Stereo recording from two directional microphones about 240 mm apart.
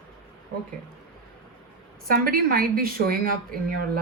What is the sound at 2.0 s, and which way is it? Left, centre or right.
A woman's voice, right.